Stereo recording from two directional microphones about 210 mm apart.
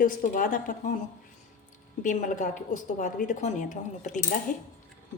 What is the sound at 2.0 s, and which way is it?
A woman's voice, 35° left (ahead or behind).